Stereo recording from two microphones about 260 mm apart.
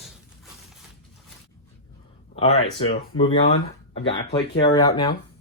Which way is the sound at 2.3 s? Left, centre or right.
Left.